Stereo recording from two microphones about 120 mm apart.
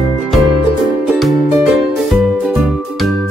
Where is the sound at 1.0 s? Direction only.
Centre (ahead or behind).